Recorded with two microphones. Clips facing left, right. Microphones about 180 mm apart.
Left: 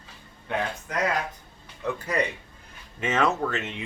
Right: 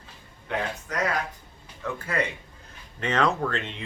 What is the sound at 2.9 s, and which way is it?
Speech, 5° left (ahead or behind).